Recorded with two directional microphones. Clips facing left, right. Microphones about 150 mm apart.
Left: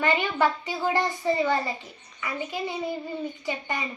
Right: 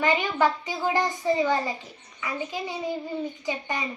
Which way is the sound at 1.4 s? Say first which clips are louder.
Right 1 dB; 15° right (ahead or behind).